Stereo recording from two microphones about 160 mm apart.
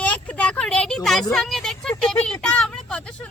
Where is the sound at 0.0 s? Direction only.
10° left (ahead or behind).